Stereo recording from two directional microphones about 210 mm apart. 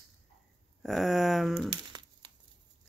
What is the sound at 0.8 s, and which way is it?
Speech, centre (ahead or behind).